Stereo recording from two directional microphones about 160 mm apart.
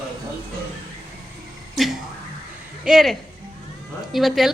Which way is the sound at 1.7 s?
Centre (ahead or behind).